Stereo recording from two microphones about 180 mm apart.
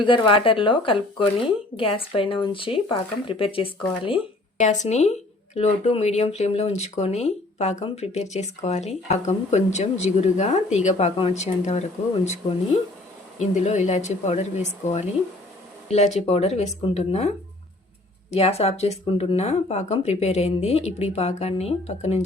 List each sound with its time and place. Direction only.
0.0 s speech: 30° left (ahead or behind)
4.5 s speech: 40° left (ahead or behind)